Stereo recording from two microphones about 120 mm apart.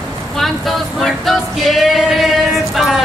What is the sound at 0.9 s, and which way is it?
Male singing, centre (ahead or behind).